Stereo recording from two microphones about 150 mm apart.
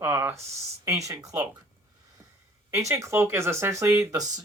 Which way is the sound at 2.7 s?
20° right (ahead or behind).